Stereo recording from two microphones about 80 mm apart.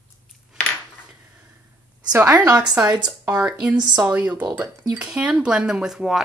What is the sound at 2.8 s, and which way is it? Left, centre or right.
Speech, right.